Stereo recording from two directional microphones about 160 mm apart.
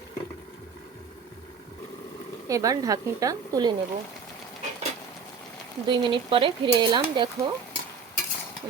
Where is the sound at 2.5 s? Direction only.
20° right (ahead or behind).